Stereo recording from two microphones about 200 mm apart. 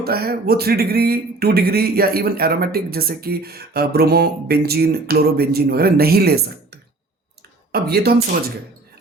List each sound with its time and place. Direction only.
0.0 s speech: 50° right (ahead or behind)